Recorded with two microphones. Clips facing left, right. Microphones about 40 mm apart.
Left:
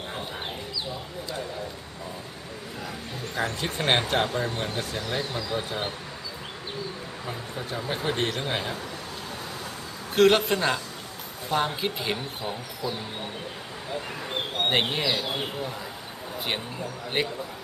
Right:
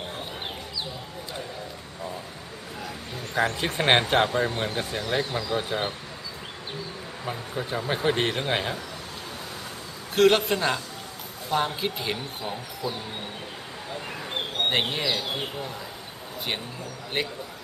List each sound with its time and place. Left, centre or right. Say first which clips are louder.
3.3 s speech: right 4 dB; right
7.2 s speech: right 4 dB; centre
10.1 s speech: even; centre
13.9 s speech: left 1 dB; centre
17.2 s speech: left 2 dB; centre